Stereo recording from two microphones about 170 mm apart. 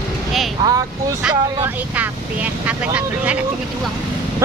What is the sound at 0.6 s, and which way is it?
Speech, 20° right (ahead or behind).